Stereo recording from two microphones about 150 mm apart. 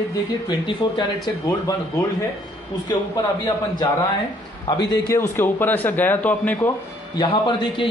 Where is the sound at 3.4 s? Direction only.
25° left (ahead or behind).